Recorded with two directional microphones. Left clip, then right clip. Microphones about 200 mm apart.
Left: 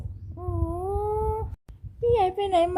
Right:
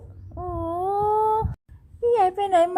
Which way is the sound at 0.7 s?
20° right (ahead or behind).